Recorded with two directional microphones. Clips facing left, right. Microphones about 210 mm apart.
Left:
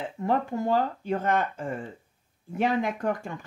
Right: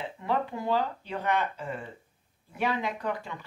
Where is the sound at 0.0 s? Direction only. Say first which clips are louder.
Left 3 dB; 45° left (ahead or behind).